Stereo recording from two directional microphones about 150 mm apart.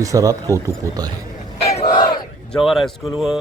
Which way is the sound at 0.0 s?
20° right (ahead or behind).